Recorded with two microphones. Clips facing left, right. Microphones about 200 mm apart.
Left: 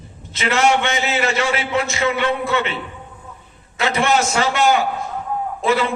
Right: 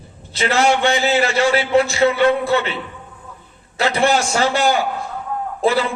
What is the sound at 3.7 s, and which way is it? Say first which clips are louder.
A man's voice: right 1 dB; 35° right (ahead or behind).